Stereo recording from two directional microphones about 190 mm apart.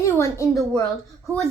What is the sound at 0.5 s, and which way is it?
Speech, centre (ahead or behind).